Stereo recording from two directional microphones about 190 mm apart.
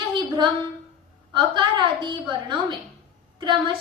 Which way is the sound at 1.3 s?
25° right (ahead or behind).